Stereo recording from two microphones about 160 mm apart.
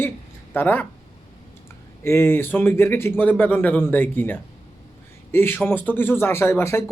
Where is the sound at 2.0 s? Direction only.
15° left (ahead or behind).